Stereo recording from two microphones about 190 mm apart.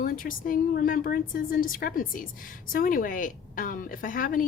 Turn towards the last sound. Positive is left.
turn(degrees=45)  # may be behind; listen again after turning